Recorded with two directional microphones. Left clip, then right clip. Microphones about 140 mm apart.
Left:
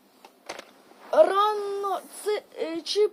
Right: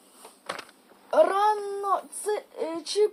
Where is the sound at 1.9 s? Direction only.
20° left (ahead or behind).